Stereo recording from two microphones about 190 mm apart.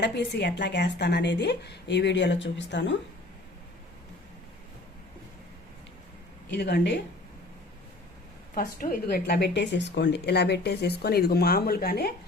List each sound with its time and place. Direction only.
0.0 s speech: 65° left (ahead or behind)
6.5 s speech: 60° left (ahead or behind)
8.5 s speech: 50° left (ahead or behind)